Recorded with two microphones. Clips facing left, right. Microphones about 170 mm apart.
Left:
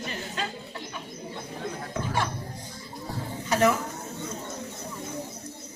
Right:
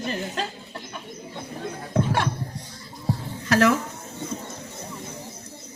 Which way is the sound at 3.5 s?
90° right.